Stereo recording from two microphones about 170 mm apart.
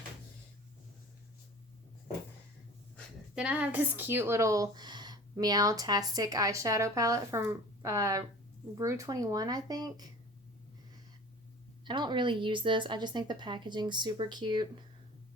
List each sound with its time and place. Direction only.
3.3 s a woman's voice: 5° right (ahead or behind); by 10.1 s 25° right (ahead or behind)
11.9 s a woman's voice: 25° right (ahead or behind)